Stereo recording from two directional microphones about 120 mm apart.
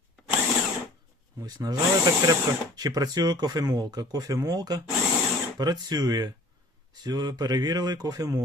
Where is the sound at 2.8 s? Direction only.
30° right (ahead or behind).